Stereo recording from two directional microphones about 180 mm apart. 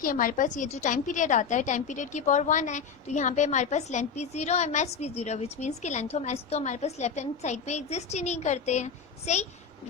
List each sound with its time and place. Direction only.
0.0 s a woman's voice: 50° left (ahead or behind)